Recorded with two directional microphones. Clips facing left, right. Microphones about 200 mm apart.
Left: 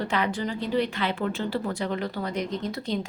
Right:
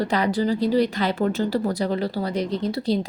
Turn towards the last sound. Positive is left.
turn(degrees=-35)  # may be behind; listen again after turning